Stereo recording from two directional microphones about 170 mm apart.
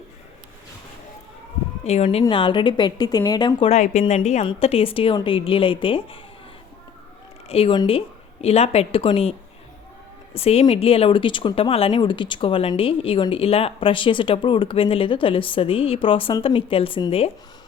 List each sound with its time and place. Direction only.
1.8 s a woman's voice: 40° left (ahead or behind)
3.7 s speech: 40° left (ahead or behind)
7.4 s a woman's voice: 35° left (ahead or behind)
10.3 s speech: 35° left (ahead or behind)